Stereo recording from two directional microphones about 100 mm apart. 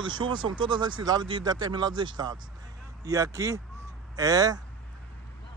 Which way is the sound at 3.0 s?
35° right (ahead or behind).